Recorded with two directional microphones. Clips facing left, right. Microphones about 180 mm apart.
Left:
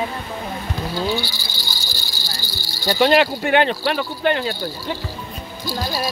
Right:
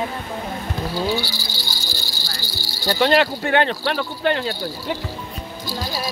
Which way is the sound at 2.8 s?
15° left (ahead or behind).